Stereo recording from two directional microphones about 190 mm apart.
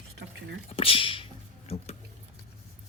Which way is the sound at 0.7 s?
30° left (ahead or behind).